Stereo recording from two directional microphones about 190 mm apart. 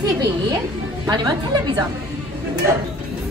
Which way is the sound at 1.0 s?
20° right (ahead or behind).